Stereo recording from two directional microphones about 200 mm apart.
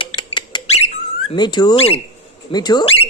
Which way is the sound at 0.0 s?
25° left (ahead or behind).